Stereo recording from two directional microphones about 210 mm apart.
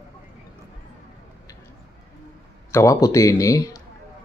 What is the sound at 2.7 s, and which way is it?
Speech, 15° left (ahead or behind).